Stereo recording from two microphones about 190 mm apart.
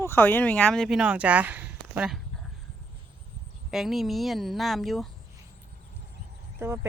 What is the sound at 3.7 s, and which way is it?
Speech, centre (ahead or behind).